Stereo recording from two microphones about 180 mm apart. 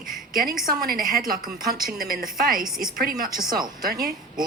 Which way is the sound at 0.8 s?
55° right (ahead or behind).